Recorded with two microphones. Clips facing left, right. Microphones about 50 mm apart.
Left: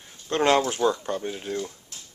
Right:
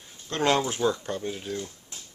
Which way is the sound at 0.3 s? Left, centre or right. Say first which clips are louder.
Left 3 dB; centre.